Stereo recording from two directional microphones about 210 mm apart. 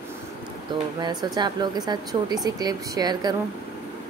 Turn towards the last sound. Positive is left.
turn(degrees=-20)  # may be behind; listen again after turning